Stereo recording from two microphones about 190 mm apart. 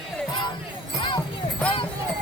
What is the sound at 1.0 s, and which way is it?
Music, 25° left (ahead or behind).